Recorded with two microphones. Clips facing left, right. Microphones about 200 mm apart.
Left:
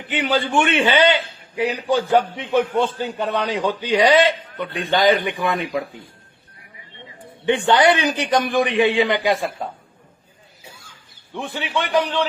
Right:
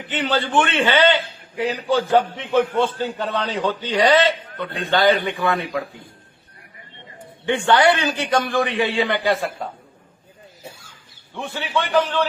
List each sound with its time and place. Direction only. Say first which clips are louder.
0.1 s a man's voice: left 1 dB; 10° left (ahead or behind)
7.4 s a man's voice: left 1 dB; 20° left (ahead or behind)
11.3 s a man's voice: even; 15° left (ahead or behind)